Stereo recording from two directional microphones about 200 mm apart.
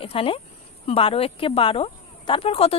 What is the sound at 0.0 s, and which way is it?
Speech, 25° left (ahead or behind).